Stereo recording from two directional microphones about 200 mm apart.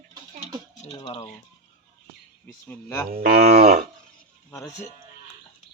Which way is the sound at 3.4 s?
35° right (ahead or behind).